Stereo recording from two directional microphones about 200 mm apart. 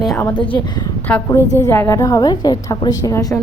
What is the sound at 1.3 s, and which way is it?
A woman's voice, 15° left (ahead or behind).